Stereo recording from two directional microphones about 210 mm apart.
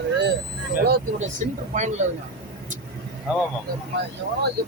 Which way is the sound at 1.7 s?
35° right (ahead or behind).